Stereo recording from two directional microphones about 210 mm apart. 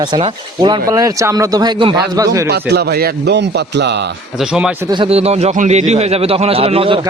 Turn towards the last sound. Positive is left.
turn(degrees=-25)  # may be behind; listen again after turning